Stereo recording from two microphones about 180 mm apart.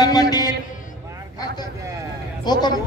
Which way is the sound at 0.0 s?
20° left (ahead or behind).